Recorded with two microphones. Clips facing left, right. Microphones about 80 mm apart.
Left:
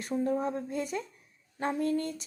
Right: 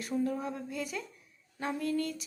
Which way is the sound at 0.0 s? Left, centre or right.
Left.